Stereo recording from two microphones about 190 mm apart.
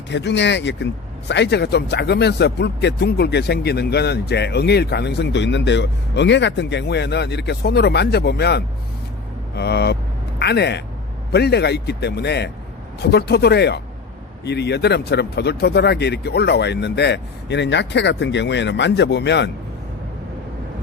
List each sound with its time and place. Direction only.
0.1 s a man's voice: 65° left (ahead or behind)